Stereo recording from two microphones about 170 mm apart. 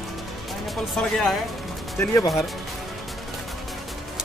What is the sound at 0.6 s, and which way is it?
Speech, centre (ahead or behind).